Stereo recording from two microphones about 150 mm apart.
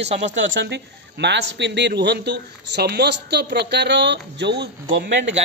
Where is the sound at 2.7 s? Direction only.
90° right.